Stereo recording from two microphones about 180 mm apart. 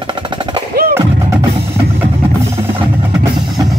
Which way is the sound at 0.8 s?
55° right (ahead or behind).